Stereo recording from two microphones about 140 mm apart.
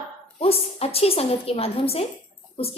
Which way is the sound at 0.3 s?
45° left (ahead or behind).